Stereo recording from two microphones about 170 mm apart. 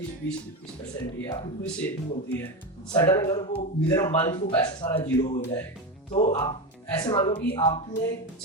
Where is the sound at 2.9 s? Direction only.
25° left (ahead or behind).